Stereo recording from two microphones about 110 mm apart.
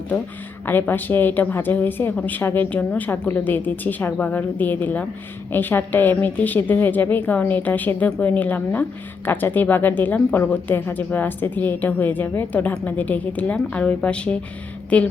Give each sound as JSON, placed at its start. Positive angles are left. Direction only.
{"t": 0.6, "sound": "a woman's voice", "side_deg": 20}